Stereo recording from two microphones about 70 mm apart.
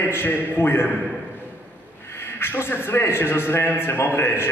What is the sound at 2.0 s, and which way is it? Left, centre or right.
A man's voice, left.